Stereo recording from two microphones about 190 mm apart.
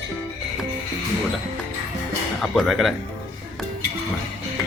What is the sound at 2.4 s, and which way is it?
Speech, centre (ahead or behind).